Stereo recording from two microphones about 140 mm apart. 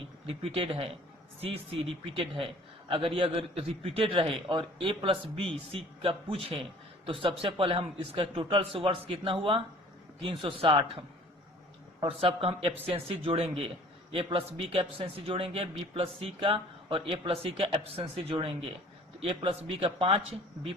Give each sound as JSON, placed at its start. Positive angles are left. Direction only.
{"t": 0.3, "sound": "a man's voice", "side_deg": -40}